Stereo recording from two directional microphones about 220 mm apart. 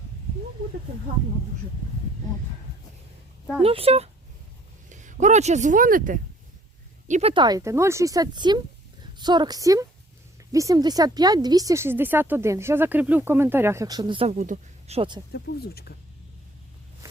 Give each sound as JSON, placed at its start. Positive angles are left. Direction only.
{"t": 3.6, "sound": "a woman's voice", "side_deg": -25}
{"t": 7.1, "sound": "a woman's voice", "side_deg": -25}
{"t": 14.3, "sound": "speech", "side_deg": -35}
{"t": 15.3, "sound": "speech", "side_deg": 45}